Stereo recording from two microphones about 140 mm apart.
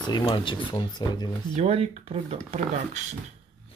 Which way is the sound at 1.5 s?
50° right (ahead or behind).